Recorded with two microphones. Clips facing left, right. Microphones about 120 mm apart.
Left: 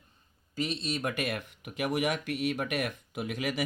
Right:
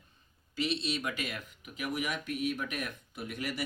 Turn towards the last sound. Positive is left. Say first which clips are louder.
# left 5 dB
turn(degrees=90)